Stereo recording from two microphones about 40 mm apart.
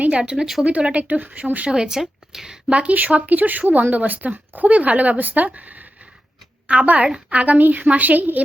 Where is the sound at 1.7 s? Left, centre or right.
Centre.